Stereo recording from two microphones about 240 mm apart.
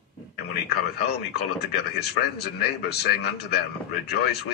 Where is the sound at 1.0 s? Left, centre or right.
Left.